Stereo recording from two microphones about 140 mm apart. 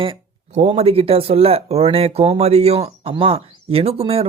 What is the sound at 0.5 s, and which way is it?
Speech, 50° right (ahead or behind).